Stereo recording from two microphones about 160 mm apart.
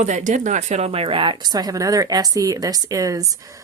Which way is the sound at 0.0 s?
50° right (ahead or behind).